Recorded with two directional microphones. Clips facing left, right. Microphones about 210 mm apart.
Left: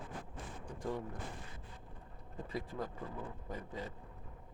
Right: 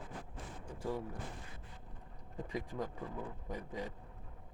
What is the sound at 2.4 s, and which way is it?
Speech, 15° right (ahead or behind).